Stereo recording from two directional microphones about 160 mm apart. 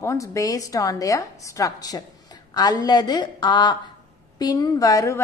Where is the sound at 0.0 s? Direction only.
20° left (ahead or behind).